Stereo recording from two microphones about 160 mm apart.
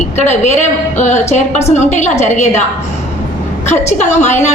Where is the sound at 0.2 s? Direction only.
45° left (ahead or behind).